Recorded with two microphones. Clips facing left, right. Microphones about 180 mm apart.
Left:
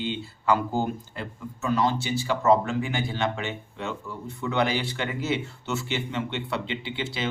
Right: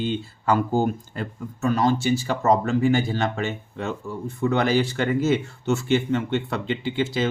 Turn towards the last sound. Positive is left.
turn(degrees=-45)  # may be behind; listen again after turning